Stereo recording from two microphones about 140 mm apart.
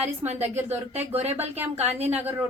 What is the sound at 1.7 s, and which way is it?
Speech, 50° right (ahead or behind).